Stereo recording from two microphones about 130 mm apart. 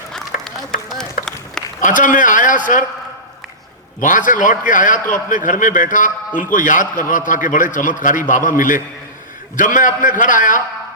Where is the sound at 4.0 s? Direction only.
90° left.